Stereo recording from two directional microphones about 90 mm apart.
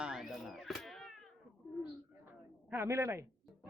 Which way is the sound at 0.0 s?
5° right (ahead or behind).